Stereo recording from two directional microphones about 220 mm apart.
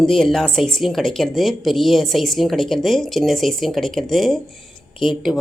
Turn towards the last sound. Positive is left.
turn(degrees=0)  # may be behind; listen again after turning